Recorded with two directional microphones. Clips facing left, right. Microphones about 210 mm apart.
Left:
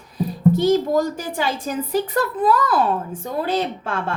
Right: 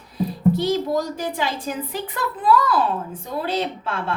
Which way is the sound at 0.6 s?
45° left (ahead or behind).